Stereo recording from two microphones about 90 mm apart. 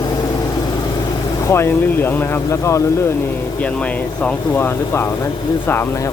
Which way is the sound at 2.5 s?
35° left (ahead or behind).